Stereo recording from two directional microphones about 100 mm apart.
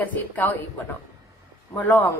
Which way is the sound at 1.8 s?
20° left (ahead or behind).